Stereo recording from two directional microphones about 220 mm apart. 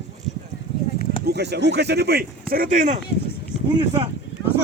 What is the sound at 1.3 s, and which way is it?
Speech, 50° right (ahead or behind).